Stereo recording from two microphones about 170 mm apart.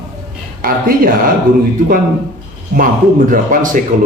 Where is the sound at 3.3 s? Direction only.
50° right (ahead or behind).